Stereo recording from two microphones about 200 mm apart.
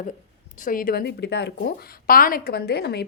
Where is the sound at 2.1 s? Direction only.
45° left (ahead or behind).